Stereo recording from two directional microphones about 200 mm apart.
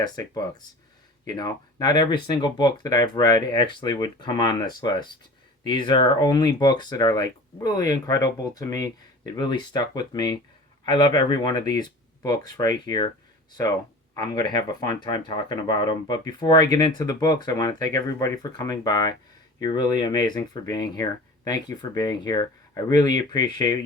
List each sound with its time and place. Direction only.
1.2 s speech: 20° left (ahead or behind)
14.2 s speech: 20° left (ahead or behind)